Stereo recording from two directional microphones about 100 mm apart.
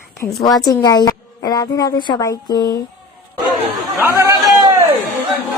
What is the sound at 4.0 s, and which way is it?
Speech, 30° right (ahead or behind).